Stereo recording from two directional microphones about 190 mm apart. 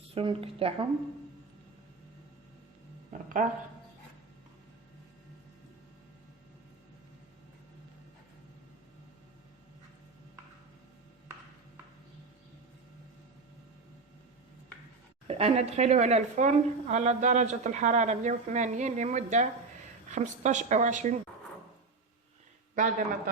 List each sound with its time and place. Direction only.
0.1 s a woman's voice: 30° right (ahead or behind)
3.1 s speech: 45° right (ahead or behind)
15.3 s speech: 35° right (ahead or behind)
22.7 s a man's voice: 45° right (ahead or behind)